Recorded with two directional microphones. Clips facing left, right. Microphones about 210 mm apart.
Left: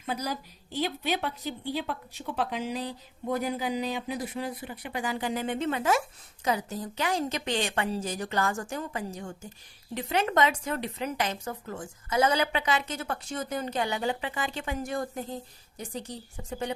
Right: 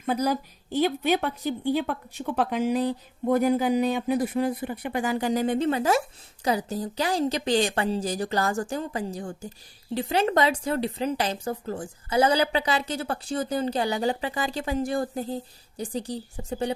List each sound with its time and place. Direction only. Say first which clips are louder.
0.0 s a woman's voice: right 8 dB; 50° right (ahead or behind); by 16.7 s 30° right (ahead or behind)